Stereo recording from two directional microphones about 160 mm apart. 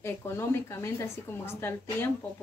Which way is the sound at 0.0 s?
15° left (ahead or behind).